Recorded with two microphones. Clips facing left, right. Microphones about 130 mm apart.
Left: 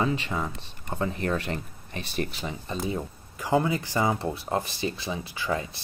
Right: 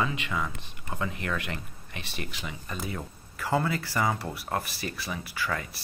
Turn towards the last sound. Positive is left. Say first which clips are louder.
# left 3 dB
turn(degrees=25)  # may be behind; listen again after turning